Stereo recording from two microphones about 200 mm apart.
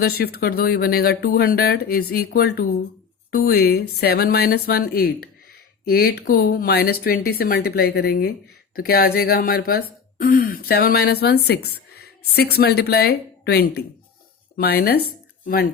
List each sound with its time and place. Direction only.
0.0 s speech: 50° left (ahead or behind)